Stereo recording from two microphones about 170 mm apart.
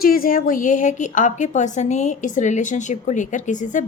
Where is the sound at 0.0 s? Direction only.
60° left (ahead or behind).